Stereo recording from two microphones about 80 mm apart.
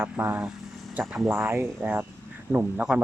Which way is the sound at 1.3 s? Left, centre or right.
Right.